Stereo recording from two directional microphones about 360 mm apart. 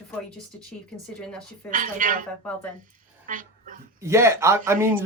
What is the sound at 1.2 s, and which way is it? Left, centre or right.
Speech, centre.